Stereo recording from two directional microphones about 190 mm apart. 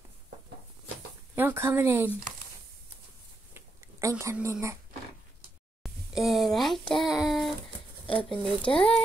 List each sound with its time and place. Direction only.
1.3 s speech: 10° right (ahead or behind)
3.5 s a sound: 15° right (ahead or behind)
4.2 s speech: 15° right (ahead or behind)
5.8 s a sound: centre (ahead or behind)
6.9 s speech: centre (ahead or behind)
8.1 s speech: 25° left (ahead or behind)